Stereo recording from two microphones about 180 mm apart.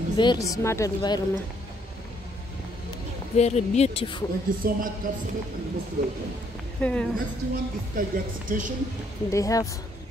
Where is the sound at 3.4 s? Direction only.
35° left (ahead or behind).